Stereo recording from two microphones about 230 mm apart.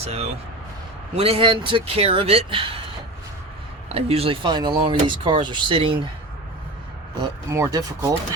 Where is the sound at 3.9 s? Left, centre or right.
Right.